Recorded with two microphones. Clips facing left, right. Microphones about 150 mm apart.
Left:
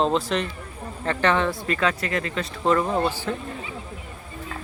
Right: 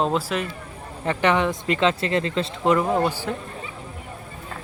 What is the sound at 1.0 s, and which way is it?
Speech, 15° right (ahead or behind).